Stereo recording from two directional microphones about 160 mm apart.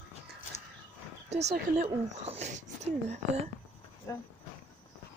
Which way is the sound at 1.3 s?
45° right (ahead or behind).